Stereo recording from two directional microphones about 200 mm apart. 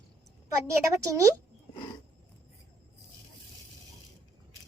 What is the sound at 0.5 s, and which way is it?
Speech, 15° right (ahead or behind).